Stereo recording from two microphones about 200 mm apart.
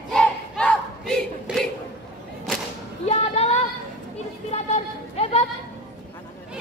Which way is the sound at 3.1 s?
30° left (ahead or behind).